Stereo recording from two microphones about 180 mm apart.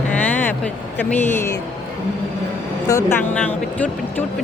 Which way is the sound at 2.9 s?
20° left (ahead or behind).